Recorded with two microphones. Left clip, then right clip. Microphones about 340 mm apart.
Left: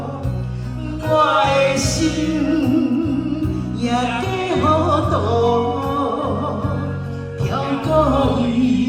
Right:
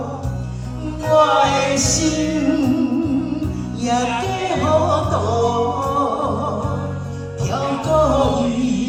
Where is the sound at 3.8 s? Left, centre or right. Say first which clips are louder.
Right 1 dB; right.